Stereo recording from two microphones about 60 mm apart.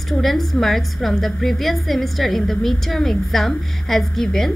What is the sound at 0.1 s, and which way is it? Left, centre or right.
A woman's voice, centre.